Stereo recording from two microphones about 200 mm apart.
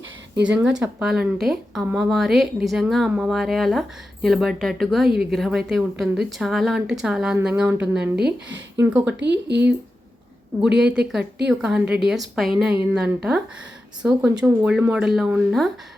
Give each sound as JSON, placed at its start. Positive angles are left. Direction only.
{"t": 0.4, "sound": "a woman's voice", "side_deg": -5}
{"t": 8.2, "sound": "speech", "side_deg": -65}
{"t": 8.7, "sound": "a woman's voice", "side_deg": -10}
{"t": 9.1, "sound": "speech", "side_deg": -60}
{"t": 10.7, "sound": "speech", "side_deg": -55}
{"t": 11.4, "sound": "speech", "side_deg": -5}